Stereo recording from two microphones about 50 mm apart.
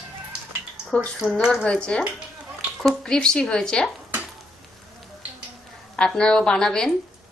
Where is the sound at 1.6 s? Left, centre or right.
Left.